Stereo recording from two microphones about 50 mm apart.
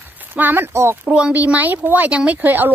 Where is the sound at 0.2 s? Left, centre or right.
Right.